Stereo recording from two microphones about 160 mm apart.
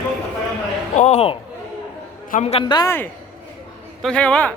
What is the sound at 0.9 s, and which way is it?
A man's voice, 45° left (ahead or behind).